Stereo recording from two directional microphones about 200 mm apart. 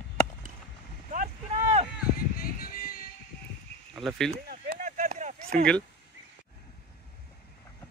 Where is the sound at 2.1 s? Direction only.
45° left (ahead or behind).